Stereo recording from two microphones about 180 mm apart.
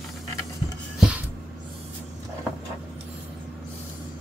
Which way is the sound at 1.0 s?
5° right (ahead or behind).